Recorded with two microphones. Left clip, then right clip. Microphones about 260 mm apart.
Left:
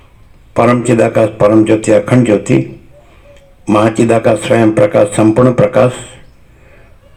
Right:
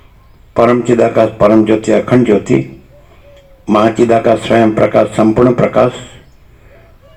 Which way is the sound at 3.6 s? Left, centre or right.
Left.